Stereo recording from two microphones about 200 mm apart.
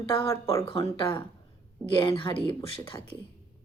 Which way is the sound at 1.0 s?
25° left (ahead or behind).